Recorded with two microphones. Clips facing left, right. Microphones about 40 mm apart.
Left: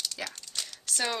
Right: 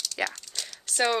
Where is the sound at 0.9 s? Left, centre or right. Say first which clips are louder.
Right 6 dB; centre.